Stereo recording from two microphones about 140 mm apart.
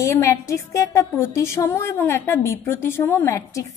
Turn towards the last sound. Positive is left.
turn(degrees=20)  # may be behind; listen again after turning